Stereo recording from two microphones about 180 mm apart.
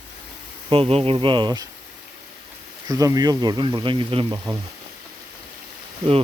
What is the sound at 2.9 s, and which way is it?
Speech, 20° right (ahead or behind).